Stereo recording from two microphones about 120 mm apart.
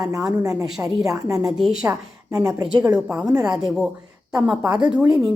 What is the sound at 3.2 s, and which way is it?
Speech, 30° right (ahead or behind).